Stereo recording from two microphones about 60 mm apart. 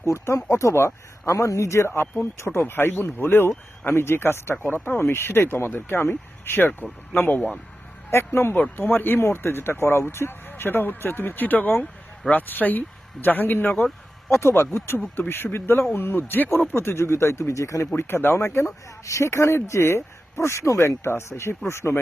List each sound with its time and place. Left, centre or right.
0.0 s speech: left
2.4 s speech: left
7.3 s speech: left
8.1 s speech: left
14.4 s speech: left
16.7 s speech: left
18.0 s speech: left